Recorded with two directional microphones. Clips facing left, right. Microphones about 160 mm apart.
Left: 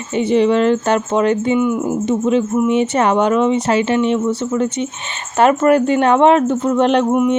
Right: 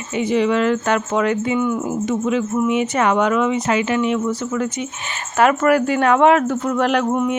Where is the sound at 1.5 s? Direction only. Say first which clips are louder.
Left 3 dB; 15° left (ahead or behind).